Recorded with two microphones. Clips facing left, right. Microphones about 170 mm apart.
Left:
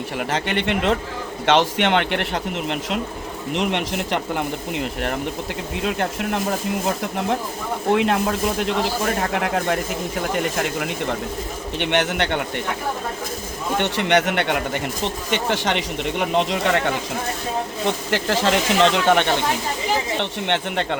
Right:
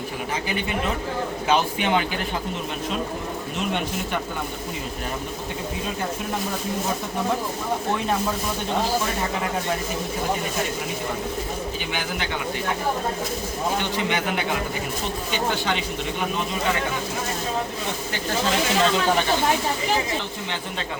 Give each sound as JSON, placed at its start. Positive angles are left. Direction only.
{"t": 0.3, "sound": "speech", "side_deg": 75}
{"t": 3.5, "sound": "speech", "side_deg": 90}
{"t": 5.8, "sound": "speech", "side_deg": 75}
{"t": 7.9, "sound": "speech", "side_deg": 85}
{"t": 9.3, "sound": "speech", "side_deg": 70}
{"t": 11.8, "sound": "speech", "side_deg": 70}
{"t": 13.7, "sound": "speech", "side_deg": 65}
{"t": 15.0, "sound": "speech", "side_deg": 85}